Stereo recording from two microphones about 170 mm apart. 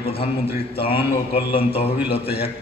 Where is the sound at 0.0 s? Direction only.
35° left (ahead or behind).